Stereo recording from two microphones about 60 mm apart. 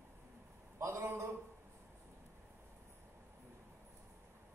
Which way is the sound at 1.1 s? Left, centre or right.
Right.